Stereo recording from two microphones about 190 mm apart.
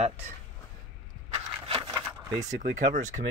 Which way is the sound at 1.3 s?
30° right (ahead or behind).